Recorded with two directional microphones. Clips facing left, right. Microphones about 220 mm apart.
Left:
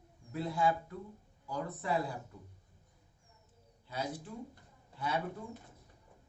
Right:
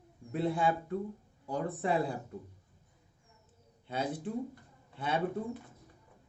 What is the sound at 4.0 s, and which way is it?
Speech, 55° right (ahead or behind).